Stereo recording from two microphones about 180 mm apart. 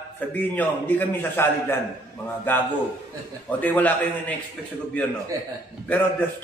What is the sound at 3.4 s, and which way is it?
Speech, 10° left (ahead or behind).